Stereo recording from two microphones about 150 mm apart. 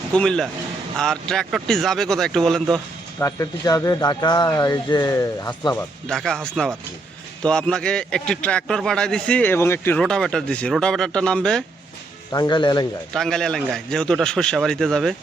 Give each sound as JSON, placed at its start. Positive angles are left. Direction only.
{"t": 0.1, "sound": "a man's voice", "side_deg": 5}
{"t": 3.2, "sound": "speech", "side_deg": 20}
{"t": 6.1, "sound": "a man's voice", "side_deg": 5}
{"t": 10.0, "sound": "a man's voice", "side_deg": 5}
{"t": 12.3, "sound": "speech", "side_deg": 30}
{"t": 13.1, "sound": "a man's voice", "side_deg": 5}